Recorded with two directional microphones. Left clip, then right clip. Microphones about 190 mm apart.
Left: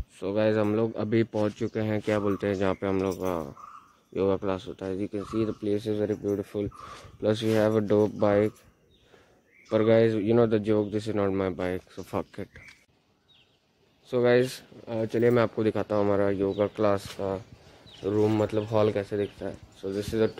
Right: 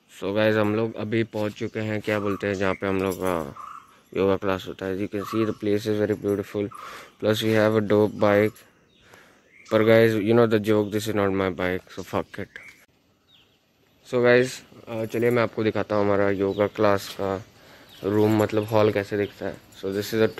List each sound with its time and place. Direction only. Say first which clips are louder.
0.1 s speech: right 3 dB; centre (ahead or behind)
0.7 s speech: right 1 dB; 20° left (ahead or behind); by 8.5 s centre (ahead or behind)
9.7 s speech: right 4 dB; centre (ahead or behind)
14.0 s speech: right 4 dB; centre (ahead or behind)
14.9 s speech: right 1 dB; 20° left (ahead or behind); by 20.3 s centre (ahead or behind)